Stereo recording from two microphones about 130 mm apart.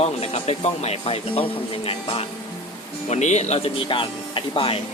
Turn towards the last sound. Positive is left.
turn(degrees=45)  # may be behind; listen again after turning